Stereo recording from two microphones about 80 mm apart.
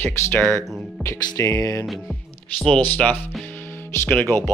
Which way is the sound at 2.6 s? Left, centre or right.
Centre.